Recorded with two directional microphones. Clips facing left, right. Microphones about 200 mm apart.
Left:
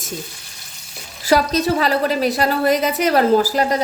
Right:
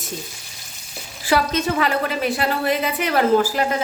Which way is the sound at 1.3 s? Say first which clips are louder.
Left 4 dB; 35° left (ahead or behind).